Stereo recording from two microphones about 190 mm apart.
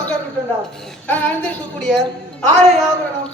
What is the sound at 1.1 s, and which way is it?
A man's voice, 10° left (ahead or behind).